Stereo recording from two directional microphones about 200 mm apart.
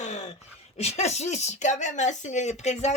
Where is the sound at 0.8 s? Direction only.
30° left (ahead or behind).